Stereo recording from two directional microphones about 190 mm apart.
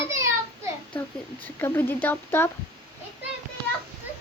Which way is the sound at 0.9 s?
10° left (ahead or behind).